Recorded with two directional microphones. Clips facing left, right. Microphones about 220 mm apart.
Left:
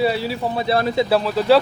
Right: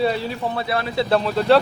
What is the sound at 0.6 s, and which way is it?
Speech, 35° left (ahead or behind).